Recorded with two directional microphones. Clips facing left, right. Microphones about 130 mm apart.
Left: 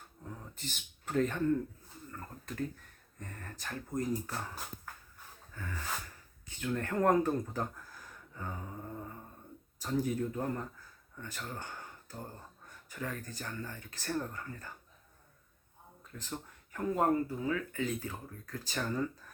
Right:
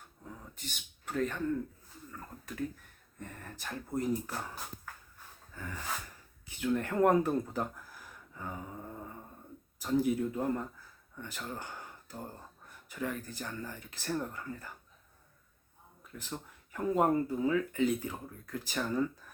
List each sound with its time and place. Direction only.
0.3 s a sound: centre (ahead or behind)
3.2 s speech: 15° right (ahead or behind)
5.5 s speech: 15° right (ahead or behind)
9.8 s speech: 10° right (ahead or behind)
16.3 s a sound: 10° right (ahead or behind)
16.9 s speech: 20° right (ahead or behind)